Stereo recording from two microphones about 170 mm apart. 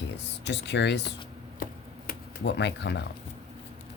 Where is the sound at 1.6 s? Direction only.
65° left (ahead or behind); by 3.0 s 90° left.